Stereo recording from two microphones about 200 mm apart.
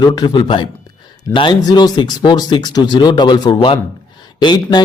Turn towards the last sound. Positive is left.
turn(degrees=20)  # may be behind; listen again after turning